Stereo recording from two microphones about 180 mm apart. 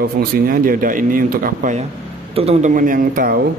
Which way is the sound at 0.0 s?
55° right (ahead or behind).